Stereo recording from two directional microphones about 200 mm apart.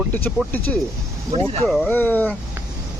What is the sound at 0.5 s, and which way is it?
Speech, 10° left (ahead or behind).